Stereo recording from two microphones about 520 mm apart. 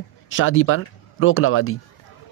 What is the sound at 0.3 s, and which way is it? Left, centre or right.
Speech, left.